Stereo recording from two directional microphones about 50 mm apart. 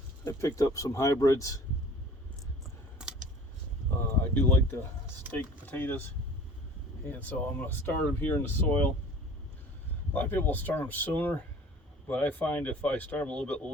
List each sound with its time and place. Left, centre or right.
0.3 s speech: left
3.0 s typing: centre
4.2 s speech: left
7.1 s speech: left
10.1 s speech: left